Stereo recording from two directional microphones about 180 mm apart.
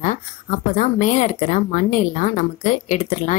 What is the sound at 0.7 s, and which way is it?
Speech, 45° left (ahead or behind).